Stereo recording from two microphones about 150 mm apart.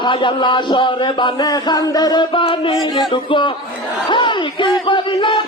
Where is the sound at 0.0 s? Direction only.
30° left (ahead or behind).